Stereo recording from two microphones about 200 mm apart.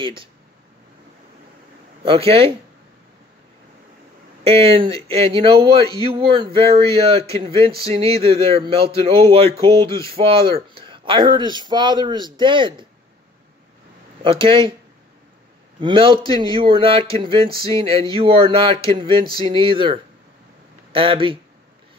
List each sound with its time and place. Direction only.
2.0 s speech: 30° right (ahead or behind)
4.5 s speech: 30° right (ahead or behind)
14.2 s speech: 25° right (ahead or behind)
15.8 s speech: 25° right (ahead or behind)